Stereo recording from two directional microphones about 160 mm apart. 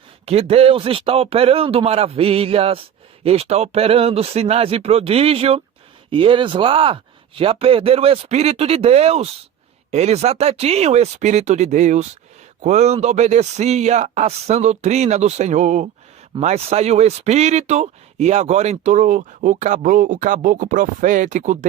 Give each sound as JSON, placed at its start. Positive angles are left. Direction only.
{"t": 0.3, "sound": "speech", "side_deg": -40}